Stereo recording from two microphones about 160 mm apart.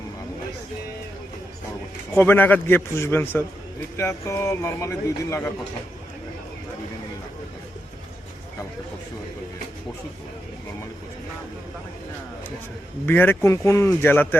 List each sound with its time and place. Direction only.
2.1 s a man's voice: 10° left (ahead or behind)
13.1 s a man's voice: 15° left (ahead or behind)